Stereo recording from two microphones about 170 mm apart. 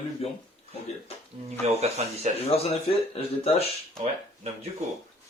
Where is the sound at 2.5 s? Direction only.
35° left (ahead or behind).